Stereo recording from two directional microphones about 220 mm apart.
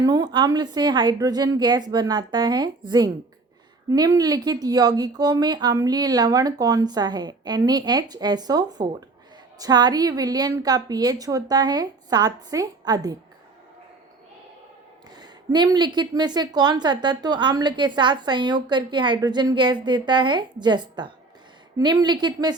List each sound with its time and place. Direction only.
0.0 s a woman's voice: 20° right (ahead or behind)
15.1 s a woman's voice: 20° right (ahead or behind)